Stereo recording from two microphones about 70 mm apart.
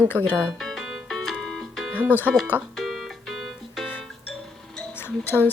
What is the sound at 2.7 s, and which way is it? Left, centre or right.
Music, centre.